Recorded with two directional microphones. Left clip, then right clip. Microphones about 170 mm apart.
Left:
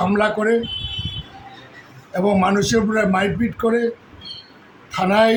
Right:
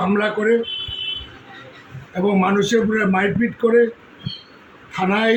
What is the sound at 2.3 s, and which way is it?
A man's voice, 20° left (ahead or behind).